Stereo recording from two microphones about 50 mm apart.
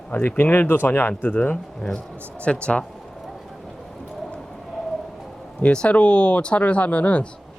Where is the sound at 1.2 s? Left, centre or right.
Left.